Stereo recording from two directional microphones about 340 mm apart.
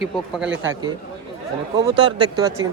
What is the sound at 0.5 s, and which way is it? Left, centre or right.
Speech, right.